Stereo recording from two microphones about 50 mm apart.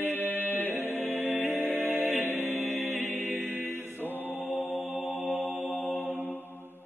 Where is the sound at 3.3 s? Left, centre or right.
Right.